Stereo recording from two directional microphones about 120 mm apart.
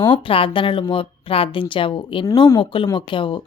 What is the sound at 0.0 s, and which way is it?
A woman's voice, 45° left (ahead or behind).